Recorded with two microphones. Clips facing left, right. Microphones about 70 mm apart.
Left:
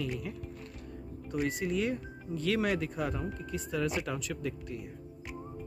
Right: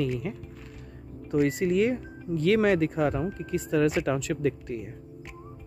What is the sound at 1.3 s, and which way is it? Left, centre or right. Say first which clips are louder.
Speech: right 8 dB; right.